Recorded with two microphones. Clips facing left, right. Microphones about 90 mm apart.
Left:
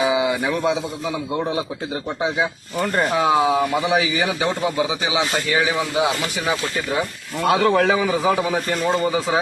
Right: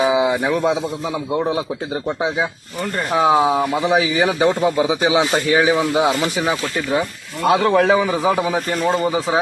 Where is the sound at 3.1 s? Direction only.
20° right (ahead or behind).